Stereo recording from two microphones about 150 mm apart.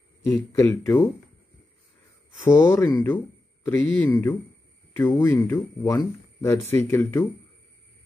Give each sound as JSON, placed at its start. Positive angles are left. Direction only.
{"t": 0.3, "sound": "speech", "side_deg": 20}
{"t": 2.4, "sound": "speech", "side_deg": 15}